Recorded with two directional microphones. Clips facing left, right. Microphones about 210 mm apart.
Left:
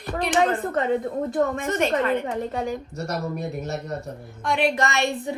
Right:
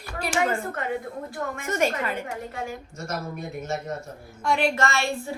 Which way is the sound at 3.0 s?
35° left (ahead or behind).